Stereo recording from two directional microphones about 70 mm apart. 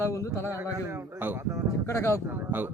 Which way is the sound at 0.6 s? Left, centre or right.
Right.